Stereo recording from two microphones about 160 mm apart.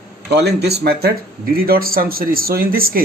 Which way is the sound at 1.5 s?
70° right (ahead or behind).